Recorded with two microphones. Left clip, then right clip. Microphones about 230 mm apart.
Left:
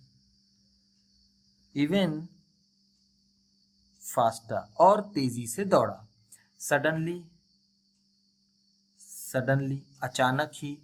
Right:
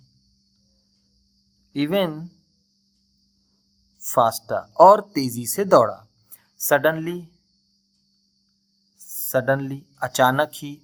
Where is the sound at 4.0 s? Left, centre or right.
Right.